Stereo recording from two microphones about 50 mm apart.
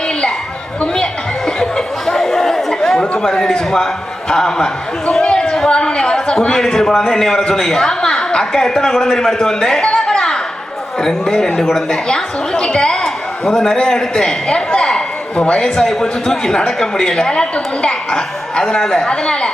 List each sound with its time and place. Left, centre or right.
1.5 s chatter: centre
3.4 s a man's voice: centre